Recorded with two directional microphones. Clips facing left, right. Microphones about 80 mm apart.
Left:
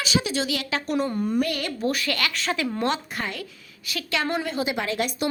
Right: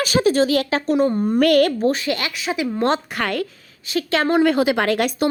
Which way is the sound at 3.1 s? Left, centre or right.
Right.